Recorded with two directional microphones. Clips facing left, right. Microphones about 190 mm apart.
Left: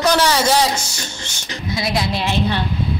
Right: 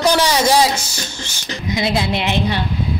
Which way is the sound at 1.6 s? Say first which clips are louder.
Right 2 dB; 20° right (ahead or behind).